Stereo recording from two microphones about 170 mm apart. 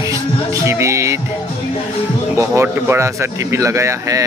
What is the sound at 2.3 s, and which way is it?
A man's voice, 15° right (ahead or behind).